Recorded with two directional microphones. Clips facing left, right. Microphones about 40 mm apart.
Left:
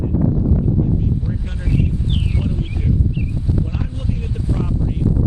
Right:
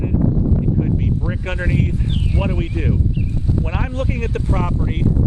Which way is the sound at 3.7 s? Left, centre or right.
Right.